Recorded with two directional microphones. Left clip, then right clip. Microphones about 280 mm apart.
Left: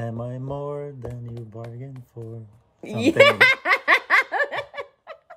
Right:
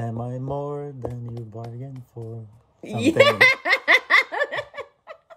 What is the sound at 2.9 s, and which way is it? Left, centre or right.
Giggle, centre.